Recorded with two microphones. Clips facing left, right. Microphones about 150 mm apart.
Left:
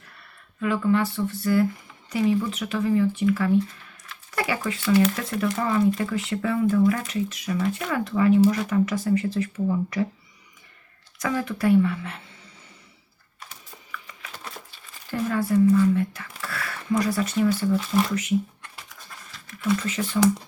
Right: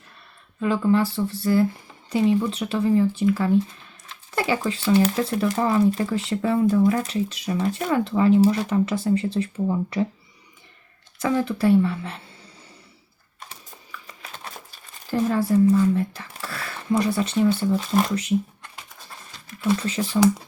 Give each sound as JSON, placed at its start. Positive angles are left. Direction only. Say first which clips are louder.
{"t": 0.6, "sound": "speech", "louder": "right 2 dB", "side_deg": -30}
{"t": 11.2, "sound": "speech", "louder": "right 3 dB", "side_deg": -30}
{"t": 14.2, "sound": "a sound", "louder": "right 5 dB", "side_deg": -35}
{"t": 14.7, "sound": "speech", "louder": "right 6 dB", "side_deg": -35}
{"t": 19.6, "sound": "speech", "louder": "right 2 dB", "side_deg": -30}